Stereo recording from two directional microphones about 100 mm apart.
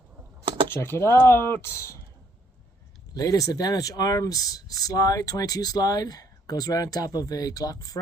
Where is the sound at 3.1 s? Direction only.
35° left (ahead or behind).